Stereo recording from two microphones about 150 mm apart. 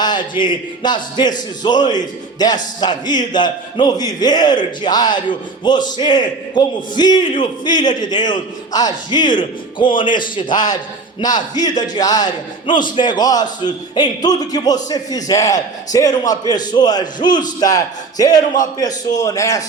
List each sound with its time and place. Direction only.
0.0 s a man's voice: 30° left (ahead or behind)